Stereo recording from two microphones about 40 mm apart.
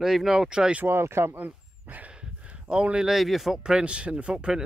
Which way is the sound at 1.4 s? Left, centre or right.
Right.